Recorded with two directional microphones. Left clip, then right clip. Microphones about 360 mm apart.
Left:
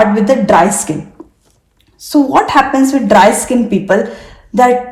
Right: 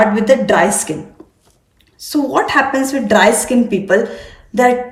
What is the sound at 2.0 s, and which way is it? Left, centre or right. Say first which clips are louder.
A woman's voice: left 5 dB; centre.